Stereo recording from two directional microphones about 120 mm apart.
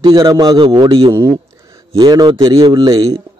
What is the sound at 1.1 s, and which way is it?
Speech, 25° right (ahead or behind).